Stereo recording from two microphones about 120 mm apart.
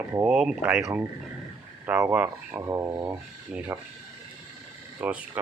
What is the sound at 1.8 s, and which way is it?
Speech, 20° right (ahead or behind).